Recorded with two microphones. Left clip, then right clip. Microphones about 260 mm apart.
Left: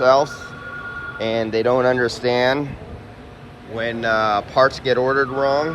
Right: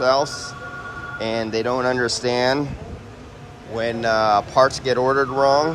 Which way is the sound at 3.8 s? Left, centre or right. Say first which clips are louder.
Even; centre.